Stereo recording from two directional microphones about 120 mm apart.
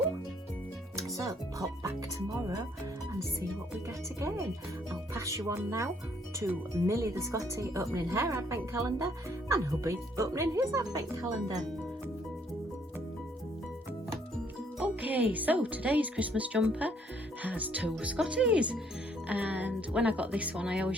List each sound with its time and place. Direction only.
1.0 s speech: 25° right (ahead or behind)
4.2 s speech: 25° right (ahead or behind)
14.8 s speech: 15° right (ahead or behind)